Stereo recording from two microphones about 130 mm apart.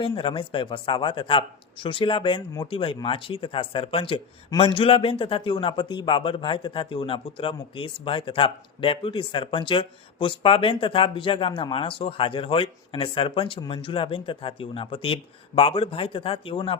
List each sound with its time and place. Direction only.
0.0 s speech: 40° left (ahead or behind)